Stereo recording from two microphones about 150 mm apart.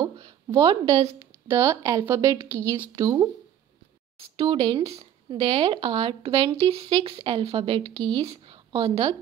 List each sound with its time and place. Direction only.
0.6 s speech: 25° right (ahead or behind)
4.2 s speech: 40° right (ahead or behind)